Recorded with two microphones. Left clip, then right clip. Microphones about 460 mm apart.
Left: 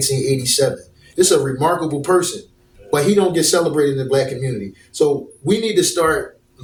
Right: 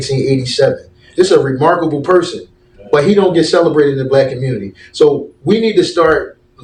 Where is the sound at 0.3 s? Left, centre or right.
Left.